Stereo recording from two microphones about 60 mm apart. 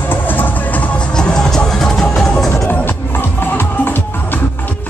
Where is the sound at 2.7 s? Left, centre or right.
Left.